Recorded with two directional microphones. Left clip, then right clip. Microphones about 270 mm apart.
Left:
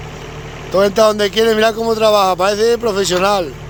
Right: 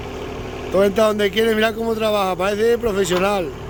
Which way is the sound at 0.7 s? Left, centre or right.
Centre.